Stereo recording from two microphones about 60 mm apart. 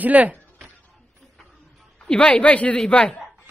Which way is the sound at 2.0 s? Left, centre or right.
Centre.